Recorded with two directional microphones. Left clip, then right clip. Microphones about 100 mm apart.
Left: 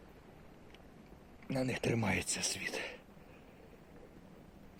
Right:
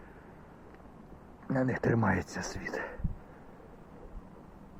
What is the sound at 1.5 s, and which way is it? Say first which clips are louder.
Speech: right 5 dB; 20° left (ahead or behind).